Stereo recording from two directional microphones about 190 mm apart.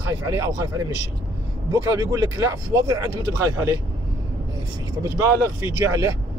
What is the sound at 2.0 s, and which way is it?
Speech, 20° right (ahead or behind).